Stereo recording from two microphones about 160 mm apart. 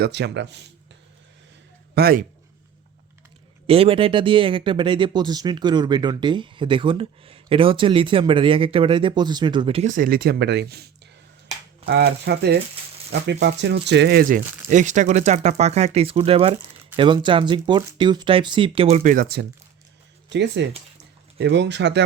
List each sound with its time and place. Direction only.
0.0 s speech: 90° right
2.0 s speech: 70° right (ahead or behind)
3.7 s speech: 35° right (ahead or behind)
9.8 s speech: 55° right (ahead or behind)
19.1 s speech: 70° right (ahead or behind)
20.3 s speech: 90° right